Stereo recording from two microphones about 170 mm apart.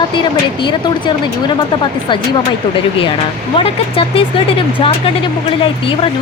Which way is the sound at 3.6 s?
35° left (ahead or behind).